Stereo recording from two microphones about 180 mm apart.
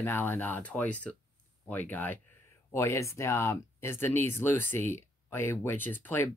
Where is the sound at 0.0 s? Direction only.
10° left (ahead or behind).